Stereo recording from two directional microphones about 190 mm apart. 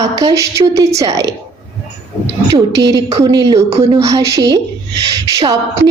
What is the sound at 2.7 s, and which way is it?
Speech, 65° right (ahead or behind).